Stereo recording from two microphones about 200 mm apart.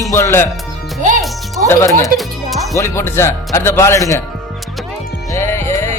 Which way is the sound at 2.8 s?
15° left (ahead or behind).